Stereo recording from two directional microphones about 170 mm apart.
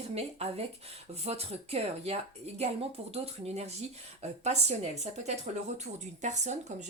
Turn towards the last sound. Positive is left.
turn(degrees=-45)  # may be behind; listen again after turning